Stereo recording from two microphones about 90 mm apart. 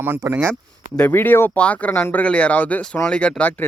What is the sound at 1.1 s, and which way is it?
Speech, 25° left (ahead or behind).